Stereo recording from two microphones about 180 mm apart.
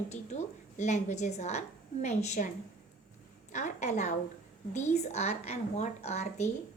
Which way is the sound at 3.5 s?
40° left (ahead or behind).